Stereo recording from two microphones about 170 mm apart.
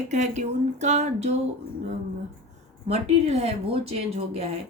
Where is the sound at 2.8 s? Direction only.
40° right (ahead or behind).